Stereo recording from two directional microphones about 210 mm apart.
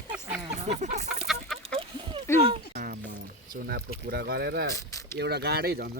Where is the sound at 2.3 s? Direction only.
10° left (ahead or behind).